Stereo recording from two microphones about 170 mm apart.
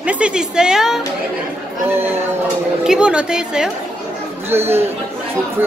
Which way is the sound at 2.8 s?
5° right (ahead or behind).